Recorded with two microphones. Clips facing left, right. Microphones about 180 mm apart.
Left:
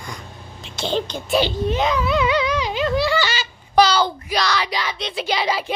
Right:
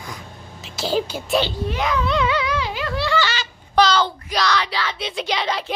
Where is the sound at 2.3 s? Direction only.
20° left (ahead or behind).